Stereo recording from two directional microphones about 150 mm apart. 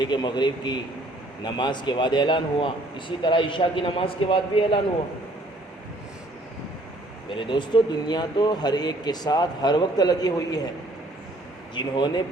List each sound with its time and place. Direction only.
0.0 s speech: 30° left (ahead or behind)
7.3 s speech: 35° left (ahead or behind)
11.7 s speech: 30° left (ahead or behind)